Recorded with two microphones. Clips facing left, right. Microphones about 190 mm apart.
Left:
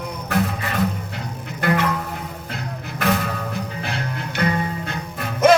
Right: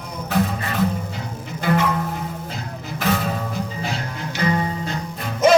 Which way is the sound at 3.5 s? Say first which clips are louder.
Right 1 dB; 60° left (ahead or behind).